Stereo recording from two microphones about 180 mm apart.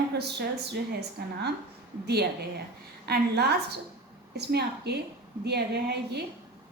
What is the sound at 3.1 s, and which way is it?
A woman's voice, 65° right (ahead or behind).